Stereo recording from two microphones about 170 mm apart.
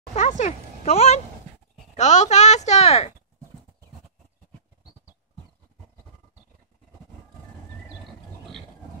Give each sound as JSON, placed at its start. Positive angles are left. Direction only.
{"t": 0.1, "sound": "speech", "side_deg": 45}